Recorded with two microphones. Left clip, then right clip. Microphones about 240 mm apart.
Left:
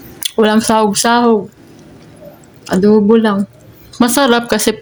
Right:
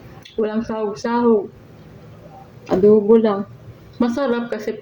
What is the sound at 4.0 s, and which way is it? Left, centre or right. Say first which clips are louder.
Speech: left 9 dB; left.